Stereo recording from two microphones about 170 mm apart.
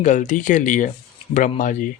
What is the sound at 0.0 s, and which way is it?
Speech, 50° left (ahead or behind).